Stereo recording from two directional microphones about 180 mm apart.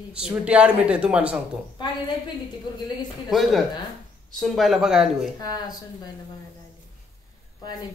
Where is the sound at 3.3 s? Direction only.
Centre (ahead or behind).